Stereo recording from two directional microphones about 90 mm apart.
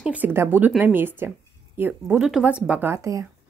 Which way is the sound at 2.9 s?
35° right (ahead or behind).